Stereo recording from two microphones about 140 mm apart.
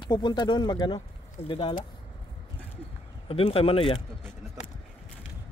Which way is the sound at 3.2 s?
40° left (ahead or behind).